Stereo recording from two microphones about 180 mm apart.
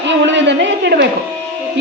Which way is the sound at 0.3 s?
80° right.